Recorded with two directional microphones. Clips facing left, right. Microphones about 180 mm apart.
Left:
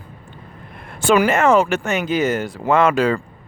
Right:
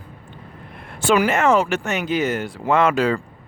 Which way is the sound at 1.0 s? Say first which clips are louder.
Left 2 dB; 50° left (ahead or behind).